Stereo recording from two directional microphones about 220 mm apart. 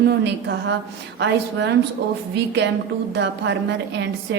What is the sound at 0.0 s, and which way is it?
A woman's voice, 50° right (ahead or behind).